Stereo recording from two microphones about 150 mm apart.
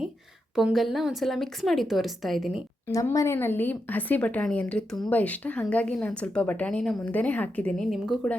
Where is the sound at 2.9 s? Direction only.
20° left (ahead or behind).